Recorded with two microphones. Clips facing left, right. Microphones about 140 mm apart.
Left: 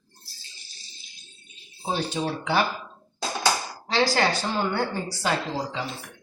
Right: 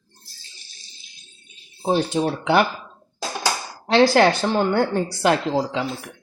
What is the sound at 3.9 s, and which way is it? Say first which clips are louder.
A woman's voice: right 8 dB; 60° right (ahead or behind).